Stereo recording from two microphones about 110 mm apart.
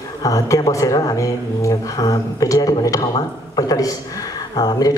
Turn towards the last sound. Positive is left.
turn(degrees=40)  # may be behind; listen again after turning